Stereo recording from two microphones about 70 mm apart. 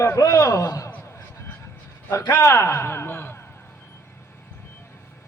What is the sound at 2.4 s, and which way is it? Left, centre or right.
Speech, left.